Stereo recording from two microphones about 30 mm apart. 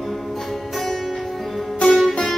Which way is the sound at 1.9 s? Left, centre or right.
Centre.